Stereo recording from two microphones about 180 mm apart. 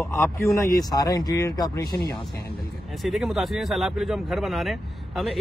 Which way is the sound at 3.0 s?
Centre (ahead or behind).